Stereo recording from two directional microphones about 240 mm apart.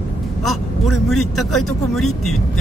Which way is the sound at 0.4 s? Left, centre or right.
Centre.